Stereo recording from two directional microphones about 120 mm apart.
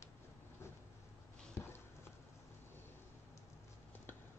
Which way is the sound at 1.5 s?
20° left (ahead or behind).